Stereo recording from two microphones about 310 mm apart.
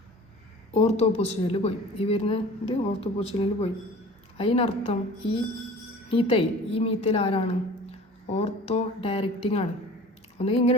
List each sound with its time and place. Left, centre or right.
0.7 s a woman's voice: centre